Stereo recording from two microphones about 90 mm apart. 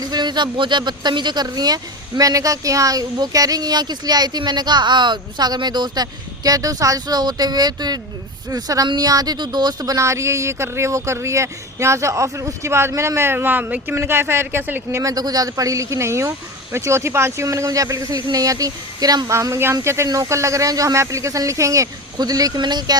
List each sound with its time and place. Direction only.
0.0 s speech: 50° right (ahead or behind); by 15.0 s 25° right (ahead or behind)
15.0 s speech: 45° right (ahead or behind)
19.3 s speech: 30° right (ahead or behind); by 23.0 s 55° right (ahead or behind)